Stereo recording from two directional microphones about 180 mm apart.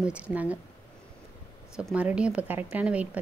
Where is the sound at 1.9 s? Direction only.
5° right (ahead or behind).